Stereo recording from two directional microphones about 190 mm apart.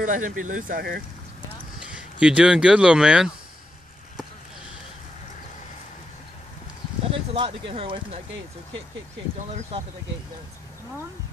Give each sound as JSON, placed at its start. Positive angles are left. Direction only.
{"t": 0.0, "sound": "speech", "side_deg": -45}
{"t": 1.8, "sound": "speech", "side_deg": -5}
{"t": 7.1, "sound": "speech", "side_deg": -25}